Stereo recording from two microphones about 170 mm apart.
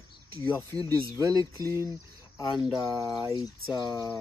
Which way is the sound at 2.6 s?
20° left (ahead or behind).